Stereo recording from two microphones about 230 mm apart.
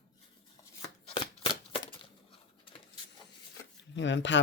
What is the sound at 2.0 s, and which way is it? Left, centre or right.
Bird, left.